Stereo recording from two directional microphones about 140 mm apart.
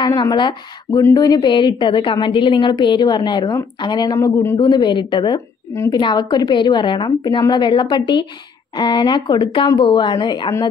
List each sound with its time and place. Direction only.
0.0 s a woman's voice: 30° left (ahead or behind)